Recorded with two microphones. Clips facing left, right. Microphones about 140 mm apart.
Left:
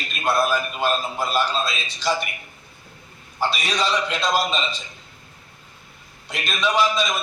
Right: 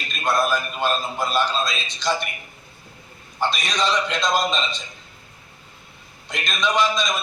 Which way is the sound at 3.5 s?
10° left (ahead or behind).